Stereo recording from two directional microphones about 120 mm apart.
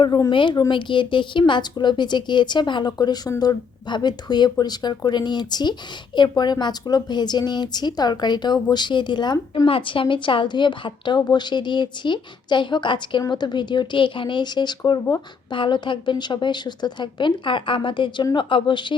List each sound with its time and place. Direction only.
0.3 s a woman's voice: 45° left (ahead or behind)